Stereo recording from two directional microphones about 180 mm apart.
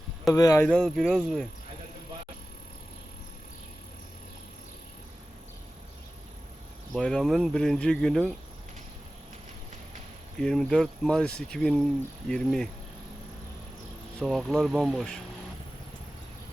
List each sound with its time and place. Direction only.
0.3 s speech: 15° left (ahead or behind)
0.7 s speech: 5° left (ahead or behind)
6.9 s speech: centre (ahead or behind)
10.4 s speech: 5° left (ahead or behind)
14.2 s speech: centre (ahead or behind)